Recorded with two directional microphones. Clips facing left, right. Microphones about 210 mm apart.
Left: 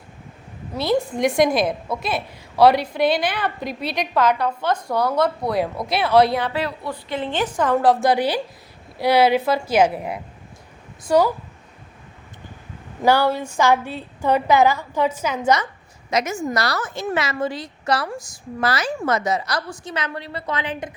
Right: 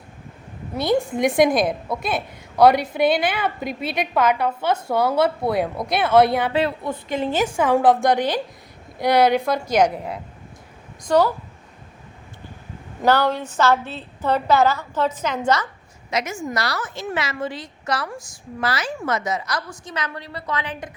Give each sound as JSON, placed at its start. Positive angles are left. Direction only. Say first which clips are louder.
{"t": 1.1, "sound": "a woman's voice", "louder": "right 2 dB", "side_deg": 0}
{"t": 6.5, "sound": "a woman's voice", "louder": "right 4 dB", "side_deg": -25}
{"t": 13.0, "sound": "a woman's voice", "louder": "left 1 dB", "side_deg": 10}
{"t": 16.0, "sound": "a woman's voice", "louder": "left 3 dB", "side_deg": 45}